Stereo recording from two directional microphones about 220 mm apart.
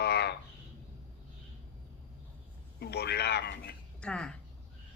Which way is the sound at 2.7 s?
45° left (ahead or behind).